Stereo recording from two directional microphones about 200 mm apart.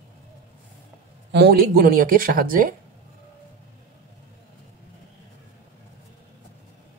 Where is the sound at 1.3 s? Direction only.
55° right (ahead or behind).